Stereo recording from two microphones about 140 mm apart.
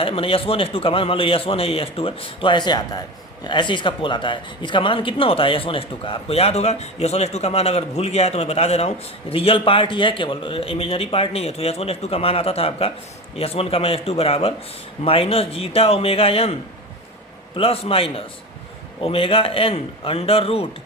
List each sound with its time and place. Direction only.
0.0 s a man's voice: 40° left (ahead or behind)
17.6 s speech: 40° left (ahead or behind)